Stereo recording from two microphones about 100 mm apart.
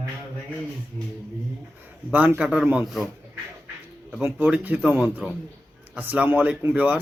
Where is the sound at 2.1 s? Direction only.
15° right (ahead or behind).